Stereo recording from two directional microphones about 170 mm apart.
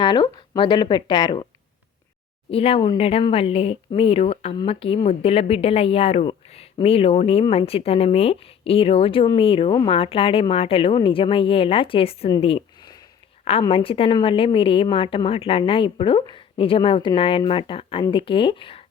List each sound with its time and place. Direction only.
0.0 s speech: 25° left (ahead or behind)
2.5 s a woman's voice: 35° left (ahead or behind)
12.4 s a sound: 30° left (ahead or behind)
13.4 s a woman's voice: 35° left (ahead or behind)